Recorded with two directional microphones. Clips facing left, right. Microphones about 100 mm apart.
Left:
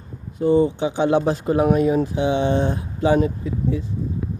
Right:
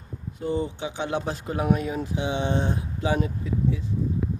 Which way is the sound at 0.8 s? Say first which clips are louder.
Left 10 dB; 35° left (ahead or behind).